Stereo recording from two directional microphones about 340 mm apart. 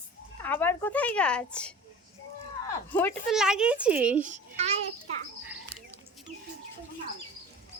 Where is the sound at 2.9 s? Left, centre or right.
Centre.